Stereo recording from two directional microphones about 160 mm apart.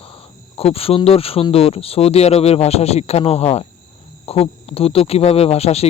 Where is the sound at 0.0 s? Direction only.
35° left (ahead or behind).